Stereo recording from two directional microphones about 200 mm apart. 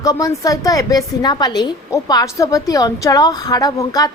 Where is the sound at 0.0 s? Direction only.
15° left (ahead or behind).